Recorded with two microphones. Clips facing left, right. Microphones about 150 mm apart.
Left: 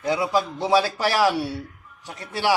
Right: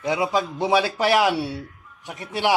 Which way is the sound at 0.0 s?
20° right (ahead or behind).